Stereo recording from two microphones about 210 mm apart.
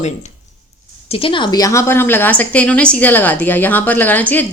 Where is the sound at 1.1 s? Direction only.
25° left (ahead or behind); by 4.4 s 10° left (ahead or behind).